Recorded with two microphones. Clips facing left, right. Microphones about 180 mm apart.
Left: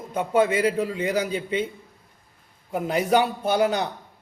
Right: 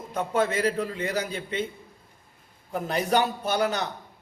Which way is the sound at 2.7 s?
10° left (ahead or behind).